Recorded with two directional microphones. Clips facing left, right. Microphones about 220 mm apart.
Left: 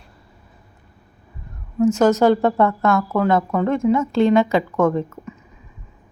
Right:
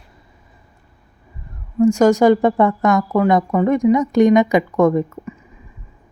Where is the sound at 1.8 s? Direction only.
10° right (ahead or behind).